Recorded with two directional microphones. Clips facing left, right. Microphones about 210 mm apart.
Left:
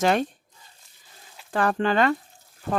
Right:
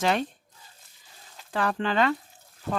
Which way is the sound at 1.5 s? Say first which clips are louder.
Left 4 dB; 50° left (ahead or behind).